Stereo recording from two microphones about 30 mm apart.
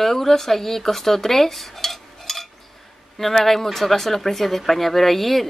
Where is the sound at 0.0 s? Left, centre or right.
Centre.